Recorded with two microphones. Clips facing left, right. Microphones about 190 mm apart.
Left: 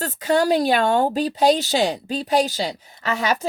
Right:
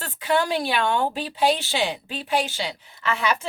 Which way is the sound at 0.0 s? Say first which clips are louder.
Left 4 dB; 40° left (ahead or behind).